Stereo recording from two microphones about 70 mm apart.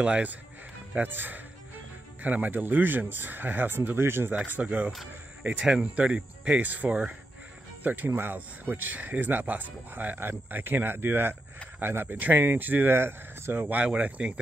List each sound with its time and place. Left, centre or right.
0.0 s speech: centre
4.6 s speech: right